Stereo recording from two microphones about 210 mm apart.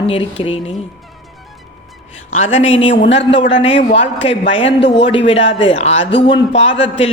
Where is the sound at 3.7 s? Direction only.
60° left (ahead or behind).